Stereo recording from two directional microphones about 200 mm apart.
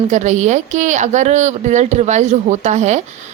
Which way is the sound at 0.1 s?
35° right (ahead or behind).